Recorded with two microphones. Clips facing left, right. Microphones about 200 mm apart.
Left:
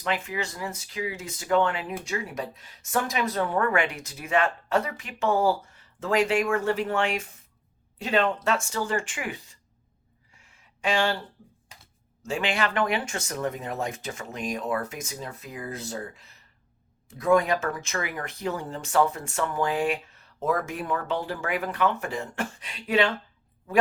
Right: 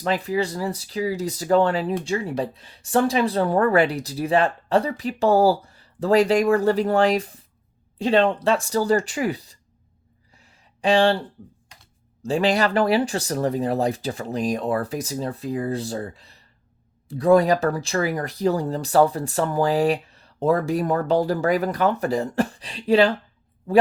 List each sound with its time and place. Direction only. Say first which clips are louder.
0.0 s speech: right 7 dB; 35° right (ahead or behind)
10.3 s a sound: right 5 dB; 35° right (ahead or behind)
12.2 s speech: right 7 dB; 35° right (ahead or behind)